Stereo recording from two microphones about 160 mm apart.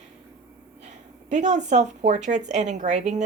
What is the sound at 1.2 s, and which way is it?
A woman's voice, 45° right (ahead or behind).